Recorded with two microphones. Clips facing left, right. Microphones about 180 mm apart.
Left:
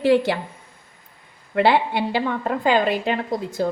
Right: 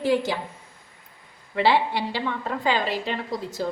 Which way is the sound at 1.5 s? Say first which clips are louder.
Left 3 dB; 55° left (ahead or behind).